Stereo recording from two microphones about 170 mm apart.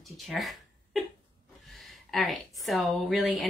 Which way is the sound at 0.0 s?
Centre (ahead or behind).